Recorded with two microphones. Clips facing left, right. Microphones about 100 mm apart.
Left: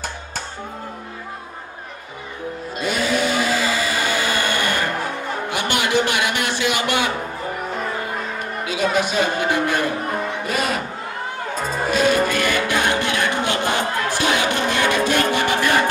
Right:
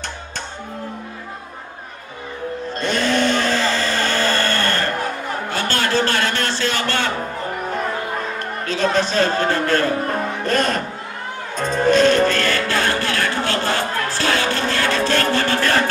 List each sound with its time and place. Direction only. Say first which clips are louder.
2.8 s music: right 2 dB; 10° left (ahead or behind)
5.5 s a sound: even; 15° left (ahead or behind)
8.6 s a man's voice: right 1 dB; 10° left (ahead or behind)
11.5 s music: right 6 dB; 5° left (ahead or behind)